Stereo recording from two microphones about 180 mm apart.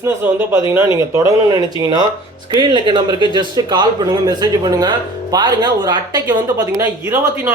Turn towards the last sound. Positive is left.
turn(degrees=-15)  # may be behind; listen again after turning